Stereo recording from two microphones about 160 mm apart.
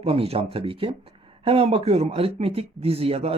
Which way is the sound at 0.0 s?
35° right (ahead or behind).